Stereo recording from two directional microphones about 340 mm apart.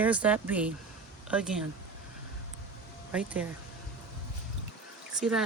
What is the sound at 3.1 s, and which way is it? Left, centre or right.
Speech, centre.